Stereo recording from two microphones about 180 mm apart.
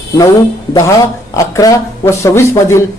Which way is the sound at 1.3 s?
20° left (ahead or behind).